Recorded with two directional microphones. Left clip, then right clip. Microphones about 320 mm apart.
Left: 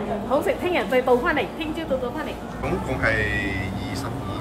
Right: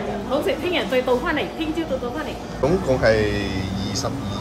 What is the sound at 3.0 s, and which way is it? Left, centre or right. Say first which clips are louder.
Speech: right 3 dB; centre.